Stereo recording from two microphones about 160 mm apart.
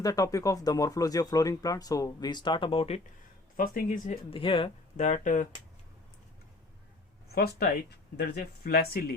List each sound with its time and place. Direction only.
0.0 s speech: 20° left (ahead or behind); by 3.0 s 40° left (ahead or behind)
3.6 s speech: 60° left (ahead or behind)
4.3 s speech: 30° left (ahead or behind)
4.9 s speech: 50° left (ahead or behind)
7.3 s speech: 75° left (ahead or behind)